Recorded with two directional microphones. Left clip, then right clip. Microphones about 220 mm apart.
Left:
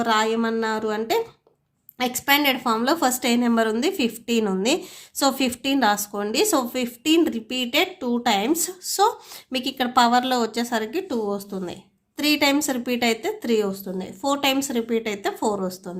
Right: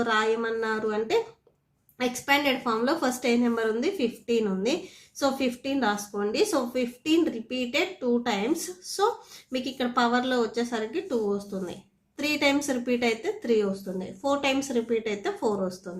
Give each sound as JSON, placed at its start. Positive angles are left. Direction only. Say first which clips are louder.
{"t": 0.0, "sound": "a woman's voice", "louder": "left 4 dB", "side_deg": 30}